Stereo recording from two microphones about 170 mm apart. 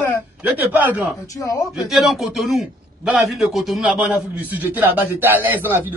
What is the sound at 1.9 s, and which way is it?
A man's voice, centre (ahead or behind).